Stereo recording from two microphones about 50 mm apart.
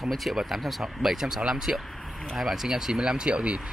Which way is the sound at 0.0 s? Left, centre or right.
Centre.